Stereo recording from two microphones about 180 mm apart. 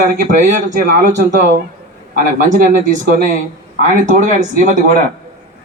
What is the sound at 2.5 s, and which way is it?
Speech, 45° right (ahead or behind).